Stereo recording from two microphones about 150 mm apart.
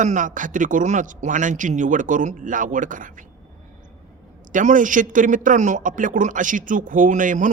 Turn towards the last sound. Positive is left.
turn(degrees=-60)  # may be behind; listen again after turning